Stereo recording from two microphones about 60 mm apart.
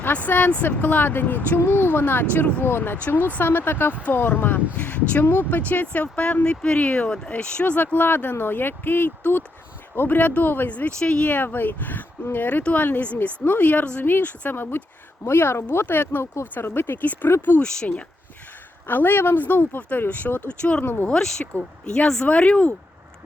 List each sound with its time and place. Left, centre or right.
0.0 s speech: left
11.3 s speech: left
17.6 s speech: centre
18.9 s speech: left; by 22.7 s centre